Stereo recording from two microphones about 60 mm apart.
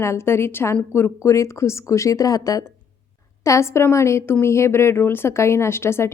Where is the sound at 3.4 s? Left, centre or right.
Left.